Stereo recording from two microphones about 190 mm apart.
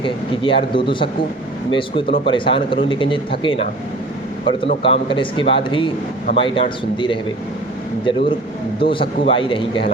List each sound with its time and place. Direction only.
0.0 s speech: 25° left (ahead or behind)
8.8 s speech: 25° left (ahead or behind)